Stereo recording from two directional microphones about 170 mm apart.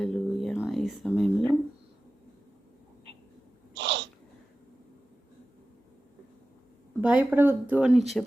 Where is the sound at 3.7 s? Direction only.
90° right.